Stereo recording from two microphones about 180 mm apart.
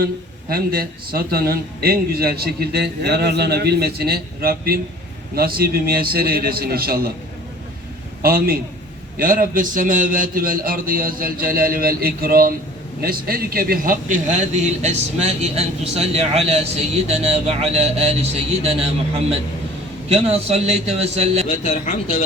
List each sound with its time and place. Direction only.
0.5 s a man's voice: 55° right (ahead or behind)
8.2 s a man's voice: 55° right (ahead or behind); by 18.9 s 35° right (ahead or behind)
20.1 s speech: 35° right (ahead or behind)
21.6 s speech: 45° left (ahead or behind)